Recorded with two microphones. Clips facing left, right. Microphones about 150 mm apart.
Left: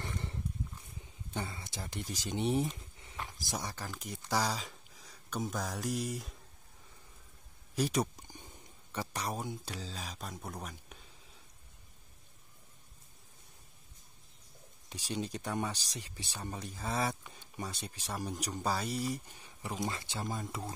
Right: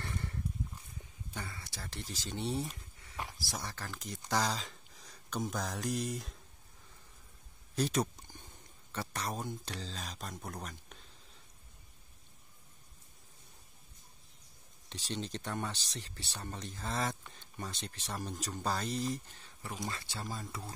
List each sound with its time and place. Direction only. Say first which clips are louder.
0.0 s horse: even; 20° left (ahead or behind)
1.3 s speech: left 5 dB; 25° left (ahead or behind); by 6.3 s centre (ahead or behind)
7.7 s a sound: left 1 dB; 10° left (ahead or behind)
8.9 s speech: left 1 dB; 15° left (ahead or behind)
14.9 s speech: left 2 dB; 10° left (ahead or behind)